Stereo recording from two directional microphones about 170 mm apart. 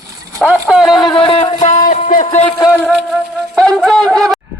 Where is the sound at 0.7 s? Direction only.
Centre (ahead or behind).